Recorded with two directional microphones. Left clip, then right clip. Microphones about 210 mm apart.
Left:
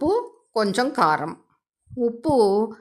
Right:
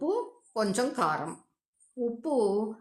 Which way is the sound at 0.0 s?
40° left (ahead or behind).